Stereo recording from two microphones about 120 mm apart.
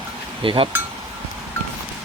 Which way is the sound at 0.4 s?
45° right (ahead or behind).